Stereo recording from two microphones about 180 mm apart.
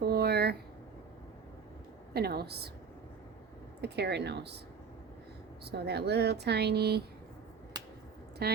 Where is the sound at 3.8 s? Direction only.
65° right (ahead or behind).